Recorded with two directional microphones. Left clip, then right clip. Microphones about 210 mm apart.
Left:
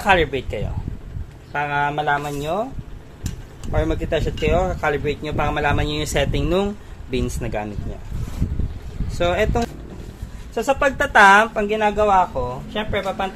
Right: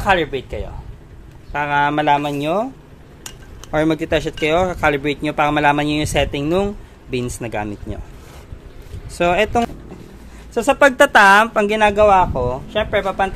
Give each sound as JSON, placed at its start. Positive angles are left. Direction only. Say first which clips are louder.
{"t": 0.0, "sound": "speech", "louder": "even", "side_deg": -5}
{"t": 1.5, "sound": "speech", "louder": "right 3 dB", "side_deg": -20}
{"t": 1.8, "sound": "speech", "louder": "right 6 dB", "side_deg": -40}
{"t": 3.7, "sound": "speech", "louder": "right 5 dB", "side_deg": -40}
{"t": 9.1, "sound": "speech", "louder": "right 4 dB", "side_deg": -25}
{"t": 10.5, "sound": "speech", "louder": "right 6 dB", "side_deg": -55}